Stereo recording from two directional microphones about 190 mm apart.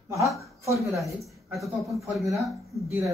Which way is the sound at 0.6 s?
15° right (ahead or behind).